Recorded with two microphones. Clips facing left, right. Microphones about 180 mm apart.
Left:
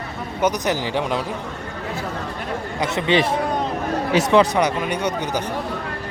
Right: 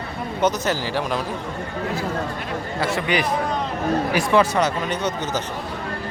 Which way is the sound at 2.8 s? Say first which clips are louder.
Left 4 dB; 25° left (ahead or behind).